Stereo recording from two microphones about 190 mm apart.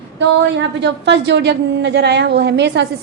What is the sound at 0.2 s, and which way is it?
A woman's voice, 70° right (ahead or behind).